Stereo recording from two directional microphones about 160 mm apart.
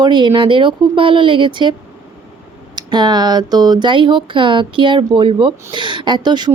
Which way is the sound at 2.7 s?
25° right (ahead or behind).